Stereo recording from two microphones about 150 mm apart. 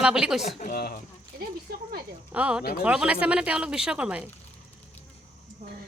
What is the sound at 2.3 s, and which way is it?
Speech, 10° right (ahead or behind).